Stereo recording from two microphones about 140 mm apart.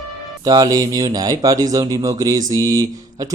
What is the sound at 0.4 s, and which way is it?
Speech, 25° right (ahead or behind).